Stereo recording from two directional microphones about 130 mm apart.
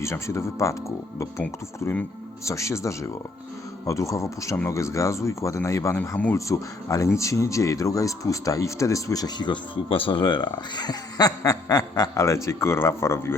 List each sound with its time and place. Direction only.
0.0 s speech: 20° left (ahead or behind)
6.3 s speech: 25° left (ahead or behind)